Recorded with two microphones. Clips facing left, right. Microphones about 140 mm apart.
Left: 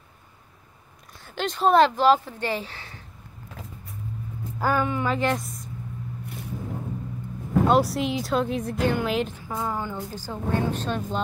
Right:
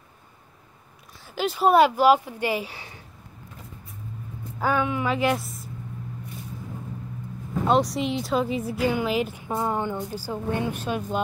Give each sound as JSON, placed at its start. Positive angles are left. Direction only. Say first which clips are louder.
{"t": 1.2, "sound": "speech", "louder": "right 1 dB", "side_deg": -5}
{"t": 4.6, "sound": "speech", "louder": "even", "side_deg": 0}
{"t": 7.6, "sound": "speech", "louder": "even", "side_deg": 0}
{"t": 9.5, "sound": "a woman's voice", "louder": "right 3 dB", "side_deg": -25}
{"t": 10.1, "sound": "speech", "louder": "even", "side_deg": -10}